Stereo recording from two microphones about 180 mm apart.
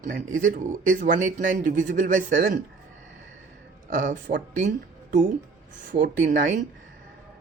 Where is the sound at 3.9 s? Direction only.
50° right (ahead or behind).